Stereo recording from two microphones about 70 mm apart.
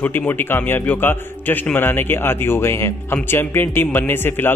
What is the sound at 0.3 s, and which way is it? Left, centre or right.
A man's voice, left.